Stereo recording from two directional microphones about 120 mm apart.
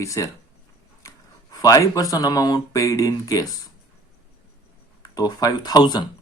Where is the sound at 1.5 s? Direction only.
30° left (ahead or behind).